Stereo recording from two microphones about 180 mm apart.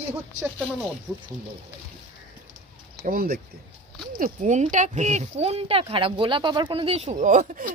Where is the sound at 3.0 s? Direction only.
55° right (ahead or behind).